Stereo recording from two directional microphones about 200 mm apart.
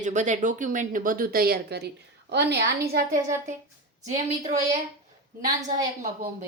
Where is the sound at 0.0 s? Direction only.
40° right (ahead or behind).